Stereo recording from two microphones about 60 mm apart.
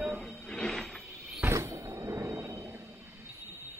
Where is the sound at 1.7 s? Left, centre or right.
Right.